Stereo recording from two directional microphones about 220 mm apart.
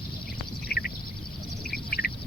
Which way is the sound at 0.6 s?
45° left (ahead or behind).